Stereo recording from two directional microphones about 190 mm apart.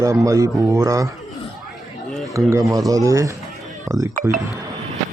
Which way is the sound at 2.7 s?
20° right (ahead or behind).